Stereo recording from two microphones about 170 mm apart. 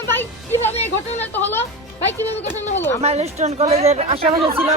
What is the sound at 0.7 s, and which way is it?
Speech, 40° left (ahead or behind).